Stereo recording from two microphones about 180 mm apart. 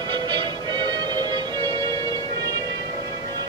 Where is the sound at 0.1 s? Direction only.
25° right (ahead or behind).